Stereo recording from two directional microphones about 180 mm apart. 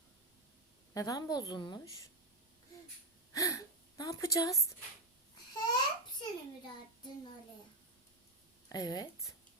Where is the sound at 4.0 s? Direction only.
20° left (ahead or behind).